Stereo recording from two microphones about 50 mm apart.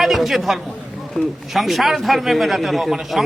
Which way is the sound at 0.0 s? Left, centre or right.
Centre.